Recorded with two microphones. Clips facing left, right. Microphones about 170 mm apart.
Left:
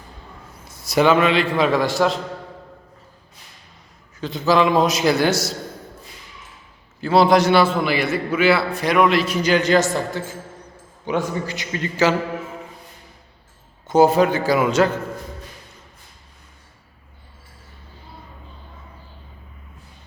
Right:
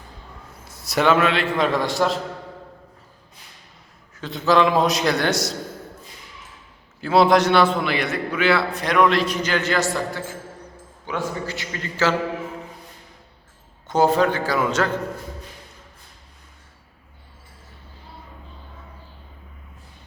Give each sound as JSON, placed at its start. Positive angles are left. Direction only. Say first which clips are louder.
{"t": 0.7, "sound": "a man's voice", "louder": "left 2 dB", "side_deg": 0}
{"t": 4.1, "sound": "a man's voice", "louder": "left 1 dB", "side_deg": 0}
{"t": 7.0, "sound": "a man's voice", "louder": "left 1 dB", "side_deg": 0}
{"t": 13.8, "sound": "a man's voice", "louder": "left 3 dB", "side_deg": 10}